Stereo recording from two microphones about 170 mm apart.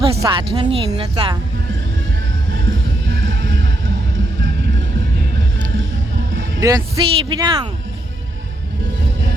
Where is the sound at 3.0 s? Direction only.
60° right (ahead or behind).